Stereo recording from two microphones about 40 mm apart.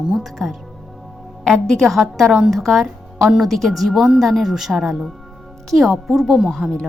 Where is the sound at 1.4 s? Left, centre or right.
Centre.